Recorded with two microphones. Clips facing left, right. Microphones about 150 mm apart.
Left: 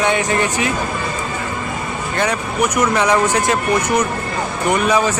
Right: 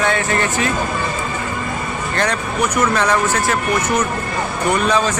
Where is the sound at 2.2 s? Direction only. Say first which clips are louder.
Left 1 dB; 10° left (ahead or behind).